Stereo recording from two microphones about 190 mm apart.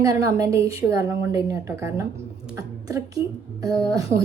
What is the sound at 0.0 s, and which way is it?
A woman's voice, 15° right (ahead or behind).